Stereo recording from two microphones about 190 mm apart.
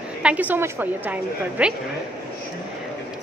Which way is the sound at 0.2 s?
5° right (ahead or behind).